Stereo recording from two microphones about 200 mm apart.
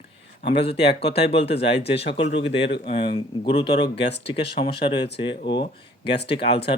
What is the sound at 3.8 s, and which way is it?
Speech, 55° left (ahead or behind).